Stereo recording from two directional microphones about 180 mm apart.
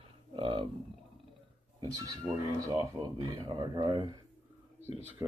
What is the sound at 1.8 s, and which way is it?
Speech, 20° right (ahead or behind).